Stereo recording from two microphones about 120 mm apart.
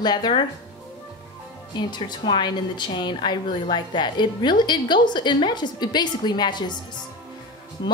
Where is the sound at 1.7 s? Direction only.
40° left (ahead or behind).